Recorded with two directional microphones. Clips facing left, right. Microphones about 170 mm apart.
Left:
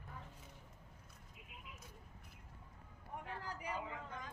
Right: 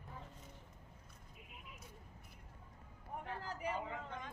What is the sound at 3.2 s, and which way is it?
Speech, 30° right (ahead or behind).